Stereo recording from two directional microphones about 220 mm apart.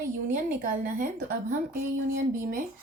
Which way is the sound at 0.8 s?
40° right (ahead or behind).